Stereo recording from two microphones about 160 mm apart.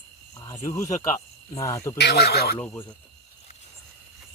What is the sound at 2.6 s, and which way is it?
Speech, 15° left (ahead or behind).